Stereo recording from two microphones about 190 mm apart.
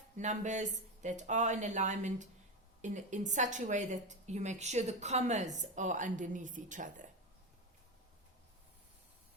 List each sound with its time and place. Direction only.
0.2 s speech: 40° right (ahead or behind)